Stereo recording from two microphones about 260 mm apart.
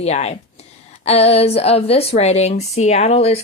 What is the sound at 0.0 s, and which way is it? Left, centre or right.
Speech, left.